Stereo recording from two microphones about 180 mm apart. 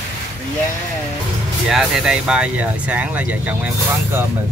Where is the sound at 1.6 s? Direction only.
Centre (ahead or behind).